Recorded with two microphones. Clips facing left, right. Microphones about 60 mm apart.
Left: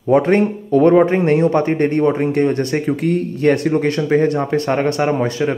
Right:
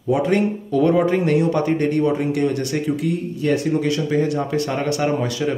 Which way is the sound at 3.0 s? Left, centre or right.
Left.